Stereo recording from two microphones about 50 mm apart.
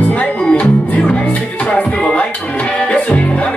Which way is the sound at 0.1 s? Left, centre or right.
Left.